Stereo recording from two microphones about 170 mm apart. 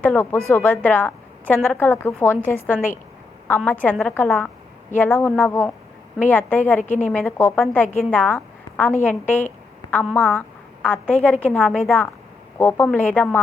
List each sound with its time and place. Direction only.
0.0 s a woman's voice: 10° left (ahead or behind)
6.7 s a woman's voice: 45° left (ahead or behind)
7.1 s a woman's voice: 10° left (ahead or behind)